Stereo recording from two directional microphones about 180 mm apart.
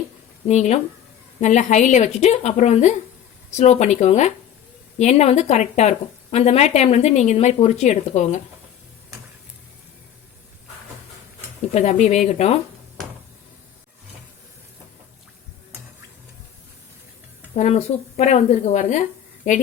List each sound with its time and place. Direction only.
0.4 s speech: 40° left (ahead or behind)
11.7 s speech: 40° left (ahead or behind)
17.5 s speech: 35° left (ahead or behind)